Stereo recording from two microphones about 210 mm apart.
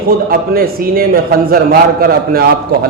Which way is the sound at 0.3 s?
45° right (ahead or behind).